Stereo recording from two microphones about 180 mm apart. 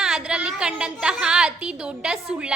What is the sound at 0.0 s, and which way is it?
A woman's voice, 5° right (ahead or behind).